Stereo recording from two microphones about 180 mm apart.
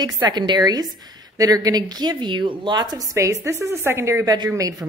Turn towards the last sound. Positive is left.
turn(degrees=-20)  # may be behind; listen again after turning